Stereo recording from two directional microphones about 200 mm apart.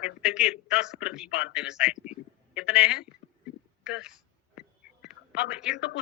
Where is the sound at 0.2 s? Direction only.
5° right (ahead or behind).